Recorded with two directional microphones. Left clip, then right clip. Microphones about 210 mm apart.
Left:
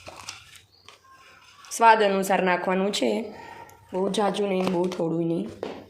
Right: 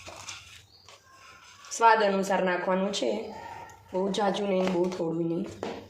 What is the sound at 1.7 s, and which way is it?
A woman's voice, 35° left (ahead or behind).